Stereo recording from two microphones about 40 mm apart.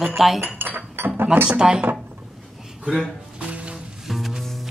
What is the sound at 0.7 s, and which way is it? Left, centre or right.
Speech, right.